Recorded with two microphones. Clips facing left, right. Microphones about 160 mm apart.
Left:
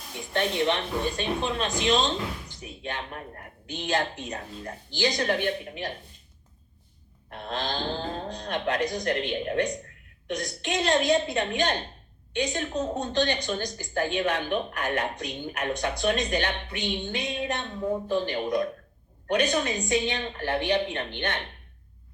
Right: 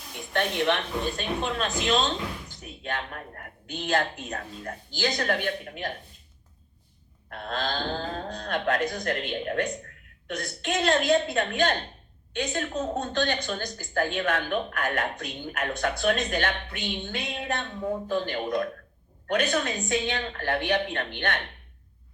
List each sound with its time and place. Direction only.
0.3 s a woman's voice: 15° left (ahead or behind)
7.3 s a woman's voice: 20° left (ahead or behind)